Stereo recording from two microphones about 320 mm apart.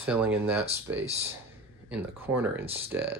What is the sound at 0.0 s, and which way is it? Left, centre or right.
Speech, centre.